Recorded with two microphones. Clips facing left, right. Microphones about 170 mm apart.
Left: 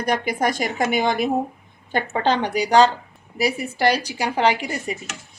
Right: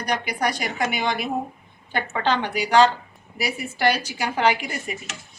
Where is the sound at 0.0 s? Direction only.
50° left (ahead or behind).